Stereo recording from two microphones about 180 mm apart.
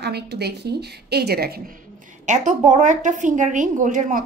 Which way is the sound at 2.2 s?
45° right (ahead or behind).